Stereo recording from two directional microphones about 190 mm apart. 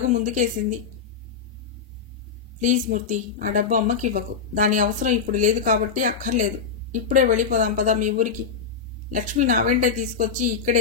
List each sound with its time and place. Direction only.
0.1 s speech: 40° right (ahead or behind)
2.6 s speech: 40° right (ahead or behind)